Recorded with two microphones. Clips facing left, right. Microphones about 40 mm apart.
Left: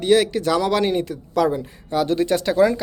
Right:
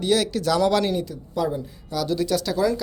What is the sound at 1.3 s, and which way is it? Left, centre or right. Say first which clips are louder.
Speech: left 6 dB; left.